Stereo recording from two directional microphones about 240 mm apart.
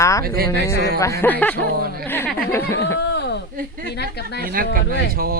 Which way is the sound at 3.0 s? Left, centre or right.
Left.